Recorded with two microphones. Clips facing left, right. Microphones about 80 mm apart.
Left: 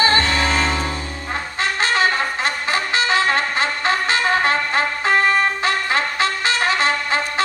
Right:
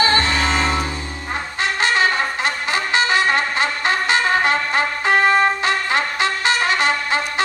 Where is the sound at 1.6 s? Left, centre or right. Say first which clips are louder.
Right 1 dB; right.